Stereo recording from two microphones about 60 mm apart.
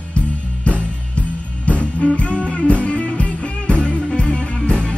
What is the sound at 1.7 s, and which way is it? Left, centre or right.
Music, left.